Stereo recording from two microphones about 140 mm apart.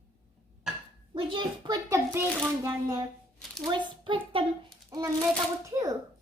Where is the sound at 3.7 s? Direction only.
35° right (ahead or behind).